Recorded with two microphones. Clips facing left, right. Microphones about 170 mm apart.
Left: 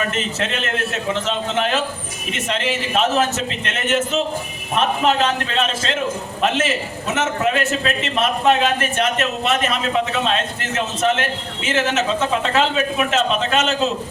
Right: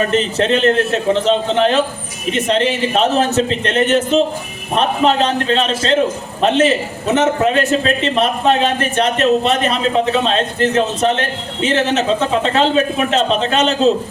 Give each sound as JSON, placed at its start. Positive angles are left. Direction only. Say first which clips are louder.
{"t": 0.0, "sound": "a man's voice", "louder": "right 7 dB", "side_deg": -35}